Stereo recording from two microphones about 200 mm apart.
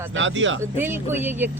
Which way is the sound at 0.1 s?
70° right (ahead or behind).